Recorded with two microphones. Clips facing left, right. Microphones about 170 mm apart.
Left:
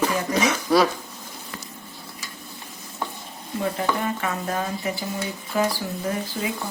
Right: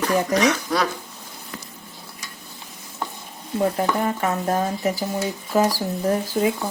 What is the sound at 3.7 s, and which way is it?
Speech, 40° right (ahead or behind).